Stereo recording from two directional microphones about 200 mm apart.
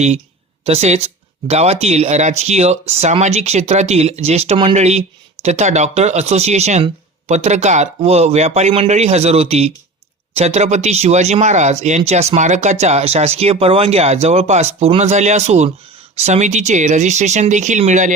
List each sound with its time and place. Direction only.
0.6 s speech: 30° right (ahead or behind)